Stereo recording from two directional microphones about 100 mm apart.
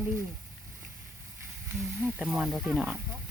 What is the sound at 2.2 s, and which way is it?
Speech, 5° right (ahead or behind).